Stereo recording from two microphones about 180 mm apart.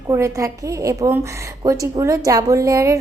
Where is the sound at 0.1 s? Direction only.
15° right (ahead or behind).